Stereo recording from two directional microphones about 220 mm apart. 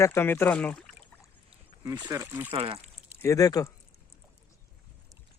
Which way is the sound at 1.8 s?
15° right (ahead or behind).